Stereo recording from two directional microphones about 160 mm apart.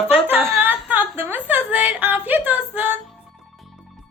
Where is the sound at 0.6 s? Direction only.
10° right (ahead or behind).